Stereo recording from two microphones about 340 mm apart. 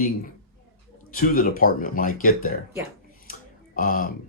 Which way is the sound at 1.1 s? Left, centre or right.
Left.